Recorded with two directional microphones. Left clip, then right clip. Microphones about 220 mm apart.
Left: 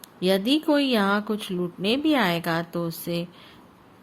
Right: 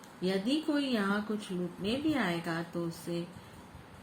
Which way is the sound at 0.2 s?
50° left (ahead or behind).